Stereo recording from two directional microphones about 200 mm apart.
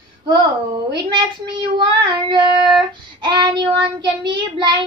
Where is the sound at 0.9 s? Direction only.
20° right (ahead or behind).